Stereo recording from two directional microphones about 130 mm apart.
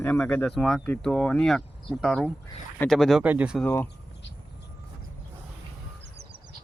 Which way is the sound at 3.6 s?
15° left (ahead or behind).